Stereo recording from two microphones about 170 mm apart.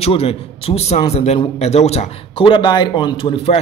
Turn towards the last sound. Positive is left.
turn(degrees=35)  # may be behind; listen again after turning